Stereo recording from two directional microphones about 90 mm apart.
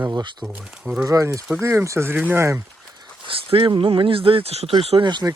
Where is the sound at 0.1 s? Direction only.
55° right (ahead or behind).